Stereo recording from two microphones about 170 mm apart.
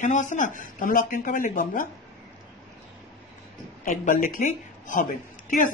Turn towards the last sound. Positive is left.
turn(degrees=55)  # may be behind; listen again after turning